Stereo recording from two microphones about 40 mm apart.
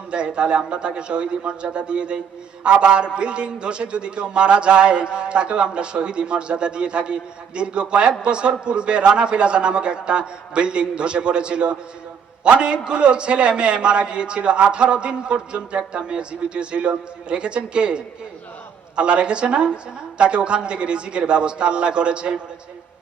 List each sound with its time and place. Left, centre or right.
0.1 s a man's voice: right